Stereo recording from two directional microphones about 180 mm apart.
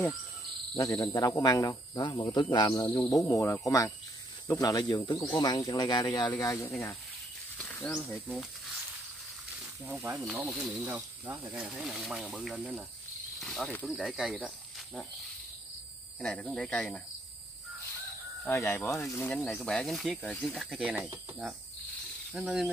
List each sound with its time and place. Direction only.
0.7 s speech: 20° left (ahead or behind); by 8.7 s centre (ahead or behind)
9.8 s speech: 10° right (ahead or behind)
13.4 s cricket: centre (ahead or behind)
13.9 s speech: centre (ahead or behind)
16.2 s speech: 5° left (ahead or behind)
18.5 s speech: 15° left (ahead or behind)